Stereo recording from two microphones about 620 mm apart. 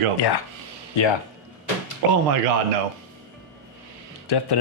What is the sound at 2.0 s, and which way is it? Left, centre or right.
Speech, right.